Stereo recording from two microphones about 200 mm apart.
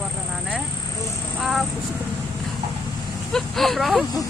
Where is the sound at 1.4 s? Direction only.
Centre (ahead or behind).